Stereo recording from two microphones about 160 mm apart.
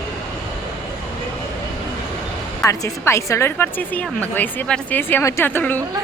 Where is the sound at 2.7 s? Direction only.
20° left (ahead or behind).